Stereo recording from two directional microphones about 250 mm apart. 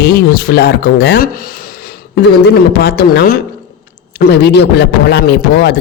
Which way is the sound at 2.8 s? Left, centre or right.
Left.